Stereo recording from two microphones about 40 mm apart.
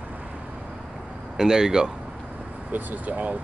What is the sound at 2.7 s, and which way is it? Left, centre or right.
Speech, right.